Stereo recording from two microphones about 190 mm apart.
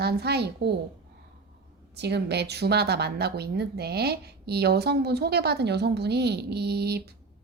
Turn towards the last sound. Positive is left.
turn(degrees=-55)  # may be behind; listen again after turning